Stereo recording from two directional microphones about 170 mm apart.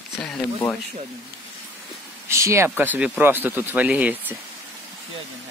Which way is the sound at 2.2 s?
15° right (ahead or behind).